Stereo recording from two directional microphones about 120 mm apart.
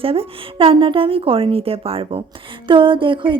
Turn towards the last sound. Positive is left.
turn(degrees=-45)  # may be behind; listen again after turning